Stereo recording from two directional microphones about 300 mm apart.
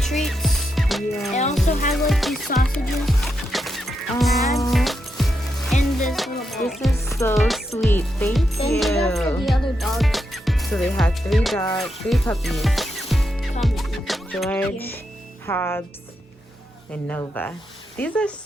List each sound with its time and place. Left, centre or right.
0.0 s music: centre
1.3 s music: left
1.9 s music: centre
15.4 s speech: centre
17.1 s speech: centre